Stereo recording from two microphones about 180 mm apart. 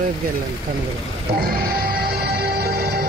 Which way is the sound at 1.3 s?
55° right (ahead or behind).